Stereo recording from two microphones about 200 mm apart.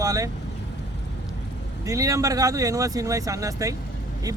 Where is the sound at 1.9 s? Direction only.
15° right (ahead or behind).